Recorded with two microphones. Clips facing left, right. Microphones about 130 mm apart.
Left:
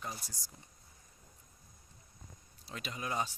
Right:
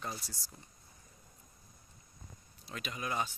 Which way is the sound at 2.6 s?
30° left (ahead or behind).